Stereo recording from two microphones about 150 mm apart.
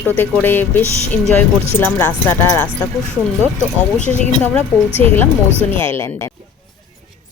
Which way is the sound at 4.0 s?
55° left (ahead or behind).